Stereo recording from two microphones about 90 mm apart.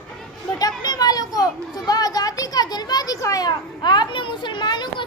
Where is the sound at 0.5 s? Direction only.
45° left (ahead or behind).